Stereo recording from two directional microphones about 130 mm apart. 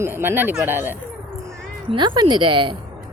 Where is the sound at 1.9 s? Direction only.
35° right (ahead or behind).